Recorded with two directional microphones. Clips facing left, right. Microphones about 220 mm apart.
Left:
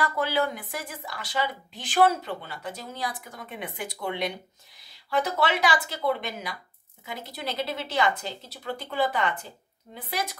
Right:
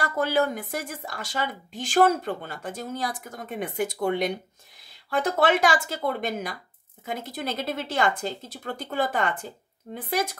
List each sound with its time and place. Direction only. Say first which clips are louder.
0.0 s speech: right 2 dB; 45° right (ahead or behind)